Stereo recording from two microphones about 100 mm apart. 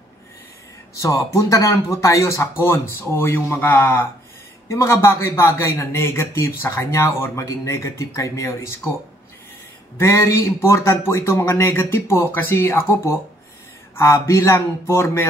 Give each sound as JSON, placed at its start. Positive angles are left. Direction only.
{"t": 0.9, "sound": "a man's voice", "side_deg": 35}
{"t": 9.9, "sound": "a man's voice", "side_deg": 30}